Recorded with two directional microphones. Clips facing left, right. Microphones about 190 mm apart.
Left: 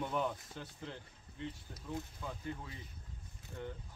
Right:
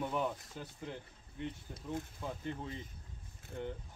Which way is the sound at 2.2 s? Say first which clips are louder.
Right 3 dB; 25° right (ahead or behind).